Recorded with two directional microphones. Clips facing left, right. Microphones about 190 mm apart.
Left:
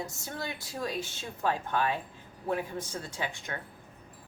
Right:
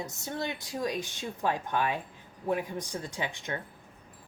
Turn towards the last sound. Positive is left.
turn(degrees=-20)  # may be behind; listen again after turning